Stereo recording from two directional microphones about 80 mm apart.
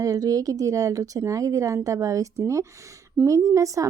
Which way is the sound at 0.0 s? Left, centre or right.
Right.